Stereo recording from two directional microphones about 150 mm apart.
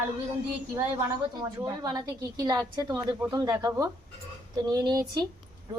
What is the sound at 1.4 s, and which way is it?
A woman's voice, 25° right (ahead or behind).